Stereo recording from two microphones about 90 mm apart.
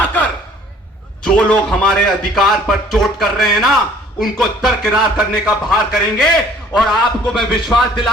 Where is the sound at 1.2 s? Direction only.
10° left (ahead or behind).